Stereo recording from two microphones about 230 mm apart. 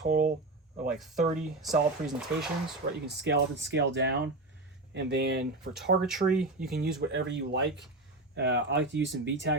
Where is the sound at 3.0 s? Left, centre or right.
Right.